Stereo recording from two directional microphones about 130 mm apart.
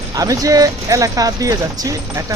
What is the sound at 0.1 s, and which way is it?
Speech, 25° right (ahead or behind).